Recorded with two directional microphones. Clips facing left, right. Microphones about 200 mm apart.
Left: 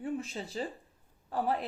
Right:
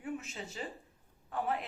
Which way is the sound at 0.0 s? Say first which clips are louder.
Left 5 dB; 35° left (ahead or behind).